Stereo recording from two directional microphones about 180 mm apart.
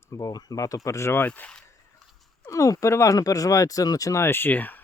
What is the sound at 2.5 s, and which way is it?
Speech, 20° left (ahead or behind).